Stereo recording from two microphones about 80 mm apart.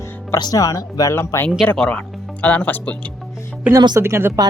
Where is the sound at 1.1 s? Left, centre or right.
Left.